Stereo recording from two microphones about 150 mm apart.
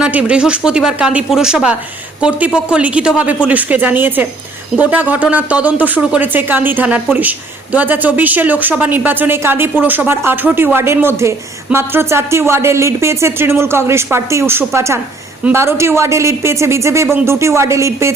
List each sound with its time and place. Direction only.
0.0 s speech: 10° right (ahead or behind)